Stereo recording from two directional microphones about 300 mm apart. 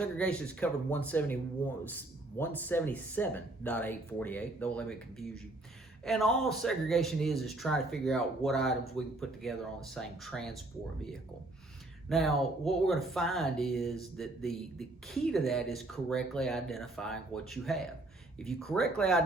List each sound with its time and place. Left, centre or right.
0.0 s speech: centre
12.0 s speech: centre